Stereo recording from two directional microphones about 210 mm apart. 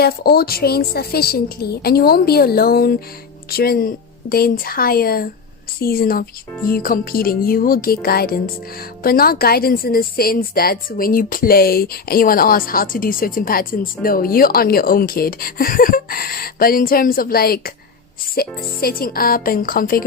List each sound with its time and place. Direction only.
0.0 s speech: 50° left (ahead or behind)